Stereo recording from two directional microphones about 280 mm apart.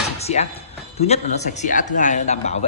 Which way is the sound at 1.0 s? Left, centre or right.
Left.